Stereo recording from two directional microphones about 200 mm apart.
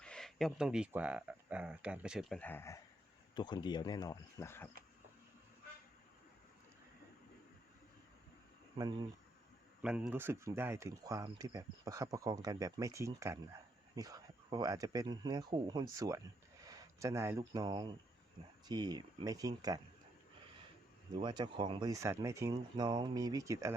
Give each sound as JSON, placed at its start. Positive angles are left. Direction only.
{"t": 0.0, "sound": "speech", "side_deg": 5}
{"t": 2.4, "sound": "speech", "side_deg": 10}
{"t": 8.8, "sound": "speech", "side_deg": -20}
{"t": 9.8, "sound": "speech", "side_deg": -5}
{"t": 21.2, "sound": "speech", "side_deg": -25}